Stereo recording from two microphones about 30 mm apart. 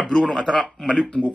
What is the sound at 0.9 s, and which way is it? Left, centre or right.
Speech, left.